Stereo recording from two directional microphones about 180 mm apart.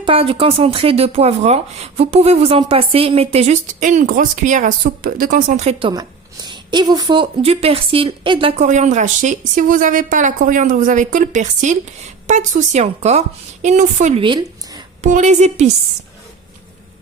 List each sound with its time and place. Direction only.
0.0 s speech: 30° right (ahead or behind)
5.9 s speech: 25° right (ahead or behind); by 14.2 s 40° right (ahead or behind)
14.2 s speech: 25° right (ahead or behind)
15.0 s speech: 40° right (ahead or behind)